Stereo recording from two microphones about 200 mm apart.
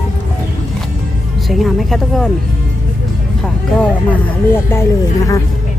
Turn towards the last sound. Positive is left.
turn(degrees=15)  # may be behind; listen again after turning